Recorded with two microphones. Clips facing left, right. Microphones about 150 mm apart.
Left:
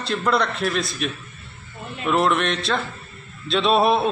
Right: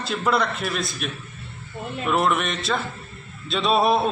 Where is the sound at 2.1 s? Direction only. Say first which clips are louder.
Left 2 dB; 5° right (ahead or behind).